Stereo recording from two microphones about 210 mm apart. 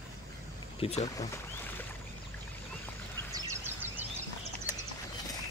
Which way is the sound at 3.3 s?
10° right (ahead or behind).